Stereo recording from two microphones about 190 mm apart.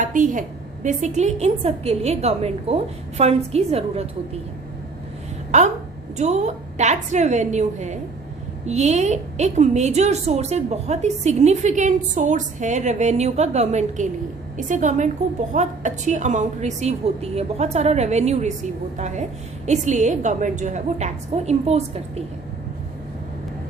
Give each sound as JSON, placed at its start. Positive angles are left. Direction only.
{"t": 0.0, "sound": "a woman's voice", "side_deg": -45}
{"t": 5.5, "sound": "a woman's voice", "side_deg": -40}